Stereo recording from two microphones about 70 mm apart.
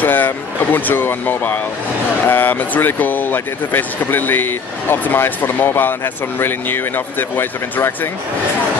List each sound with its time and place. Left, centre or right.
0.0 s speech: left